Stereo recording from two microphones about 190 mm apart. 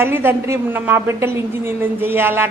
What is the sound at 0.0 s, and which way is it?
A man's voice, 10° right (ahead or behind).